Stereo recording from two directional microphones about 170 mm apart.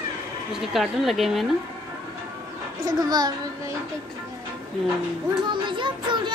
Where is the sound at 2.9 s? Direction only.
25° right (ahead or behind).